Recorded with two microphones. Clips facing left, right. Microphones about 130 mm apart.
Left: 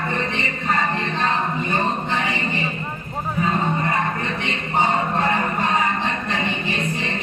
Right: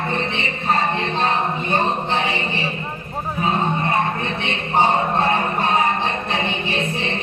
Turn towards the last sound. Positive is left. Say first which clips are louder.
# right 2 dB
turn(degrees=-25)  # may be behind; listen again after turning